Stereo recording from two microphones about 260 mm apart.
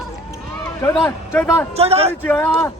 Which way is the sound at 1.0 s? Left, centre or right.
Centre.